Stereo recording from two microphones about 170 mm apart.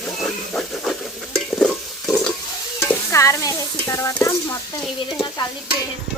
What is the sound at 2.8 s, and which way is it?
Stir, 15° left (ahead or behind).